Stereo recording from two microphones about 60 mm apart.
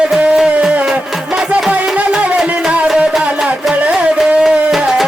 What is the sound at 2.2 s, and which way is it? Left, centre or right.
Music, centre.